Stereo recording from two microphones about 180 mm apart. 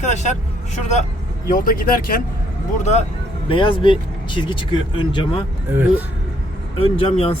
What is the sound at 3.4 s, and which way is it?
Speech, 30° left (ahead or behind).